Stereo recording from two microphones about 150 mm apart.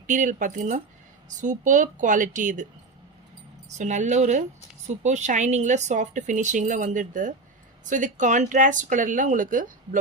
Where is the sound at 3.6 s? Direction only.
55° right (ahead or behind).